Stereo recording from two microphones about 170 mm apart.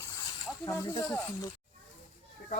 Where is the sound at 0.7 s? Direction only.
15° left (ahead or behind).